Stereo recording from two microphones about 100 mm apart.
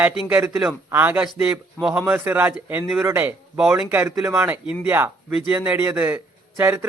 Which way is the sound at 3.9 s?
20° right (ahead or behind).